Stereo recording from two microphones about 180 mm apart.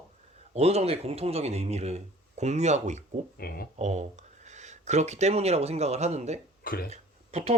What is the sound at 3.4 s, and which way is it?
Speech, 60° left (ahead or behind).